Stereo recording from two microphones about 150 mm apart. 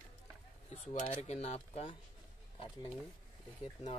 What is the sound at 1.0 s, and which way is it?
Speech, 45° left (ahead or behind).